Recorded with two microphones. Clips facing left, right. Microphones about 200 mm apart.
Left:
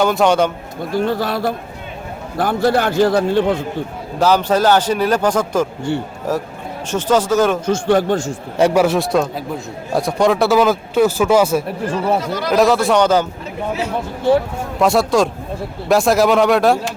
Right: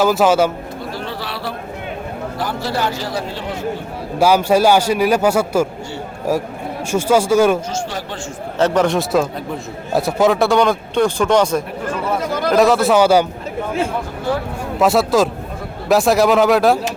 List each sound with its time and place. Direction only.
0.0 s speech: 5° right (ahead or behind)
0.9 s a man's voice: 45° left (ahead or behind)
4.2 s a man's voice: 10° right (ahead or behind)
6.9 s a man's voice: 10° right (ahead or behind)
7.7 s a man's voice: 55° left (ahead or behind)
8.5 s speech: 10° left (ahead or behind); by 13.2 s 10° right (ahead or behind)
14.8 s speech: centre (ahead or behind)